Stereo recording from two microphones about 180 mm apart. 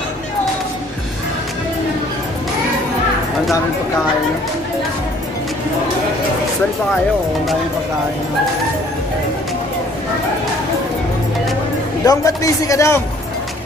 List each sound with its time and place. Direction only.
12.0 s a man's voice: 20° left (ahead or behind)